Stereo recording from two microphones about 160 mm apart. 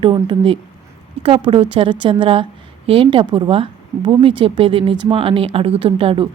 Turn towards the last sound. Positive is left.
turn(degrees=-35)  # may be behind; listen again after turning